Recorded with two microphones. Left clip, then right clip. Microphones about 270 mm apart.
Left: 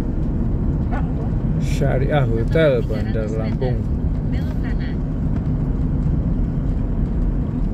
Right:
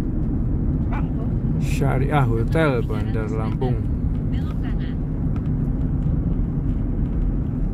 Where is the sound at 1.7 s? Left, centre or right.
Centre.